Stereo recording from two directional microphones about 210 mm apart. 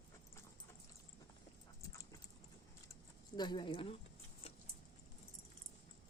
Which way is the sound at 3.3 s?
20° left (ahead or behind).